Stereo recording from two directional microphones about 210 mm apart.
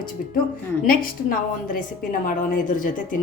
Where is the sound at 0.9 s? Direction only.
40° left (ahead or behind).